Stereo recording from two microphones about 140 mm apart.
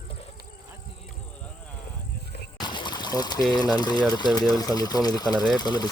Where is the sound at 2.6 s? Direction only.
30° left (ahead or behind).